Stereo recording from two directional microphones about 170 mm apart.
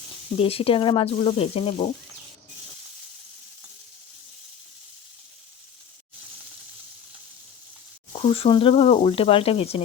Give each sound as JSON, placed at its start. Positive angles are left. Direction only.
{"t": 0.3, "sound": "speech", "side_deg": 35}
{"t": 8.1, "sound": "speech", "side_deg": 35}